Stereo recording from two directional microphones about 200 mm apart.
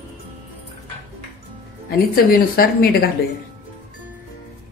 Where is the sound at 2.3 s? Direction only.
50° left (ahead or behind).